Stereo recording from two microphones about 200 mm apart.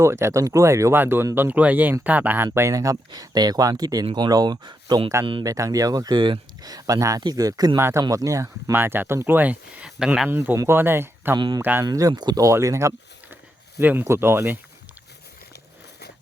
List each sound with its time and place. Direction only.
0.0 s speech: 15° right (ahead or behind)
11.3 s speech: 20° right (ahead or behind)
11.6 s speech: 10° right (ahead or behind)